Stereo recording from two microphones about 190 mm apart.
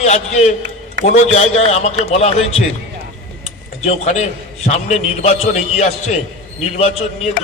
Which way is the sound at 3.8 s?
35° left (ahead or behind).